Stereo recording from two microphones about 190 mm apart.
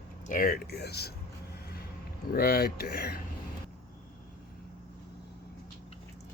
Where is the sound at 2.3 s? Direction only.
50° left (ahead or behind).